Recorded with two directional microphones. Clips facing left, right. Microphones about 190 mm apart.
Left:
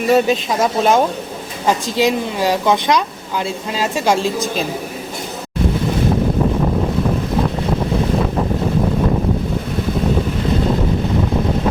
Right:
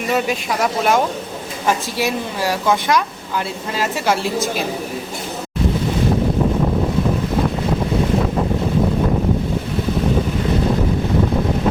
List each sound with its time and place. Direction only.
0.1 s a woman's voice: 25° left (ahead or behind)